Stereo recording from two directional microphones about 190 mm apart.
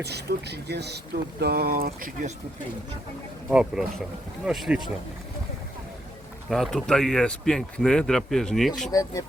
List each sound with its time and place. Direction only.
0.0 s speech: 60° right (ahead or behind)
3.5 s speech: 5° right (ahead or behind)
6.5 s speech: centre (ahead or behind)
8.9 s speech: 20° left (ahead or behind)